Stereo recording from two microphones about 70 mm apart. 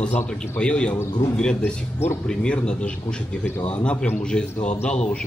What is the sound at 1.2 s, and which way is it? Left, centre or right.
Speech, left.